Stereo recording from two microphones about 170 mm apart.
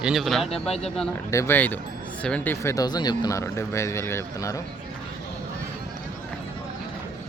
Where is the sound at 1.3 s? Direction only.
15° left (ahead or behind).